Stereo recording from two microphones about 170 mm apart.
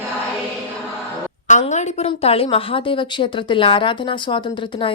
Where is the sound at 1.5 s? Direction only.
45° left (ahead or behind).